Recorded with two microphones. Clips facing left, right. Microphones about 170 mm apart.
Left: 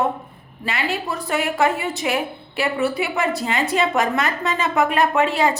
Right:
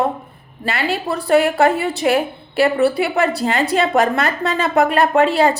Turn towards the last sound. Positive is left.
turn(degrees=-35)  # may be behind; listen again after turning